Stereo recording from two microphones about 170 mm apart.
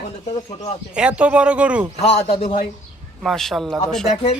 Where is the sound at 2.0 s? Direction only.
40° left (ahead or behind).